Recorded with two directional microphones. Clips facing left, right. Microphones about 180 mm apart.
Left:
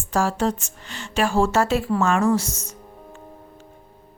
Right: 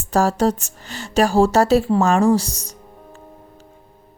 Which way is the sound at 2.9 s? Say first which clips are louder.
Even; centre (ahead or behind).